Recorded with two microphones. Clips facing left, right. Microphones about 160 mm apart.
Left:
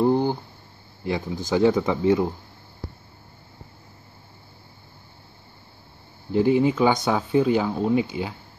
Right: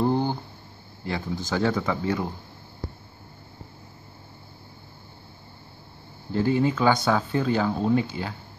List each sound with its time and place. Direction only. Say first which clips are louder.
0.0 s a sound: left 3 dB; 15° left (ahead or behind)
1.0 s speech: left 3 dB; 15° left (ahead or behind)
6.3 s speech: left 4 dB; 15° left (ahead or behind)